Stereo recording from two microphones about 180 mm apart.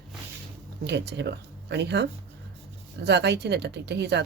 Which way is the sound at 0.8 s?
70° right (ahead or behind).